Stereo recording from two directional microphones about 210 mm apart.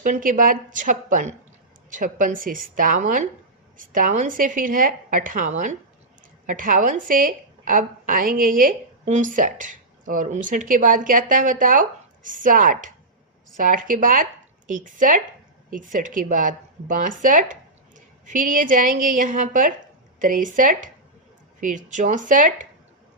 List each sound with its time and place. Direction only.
0.0 s a woman's voice: 40° right (ahead or behind)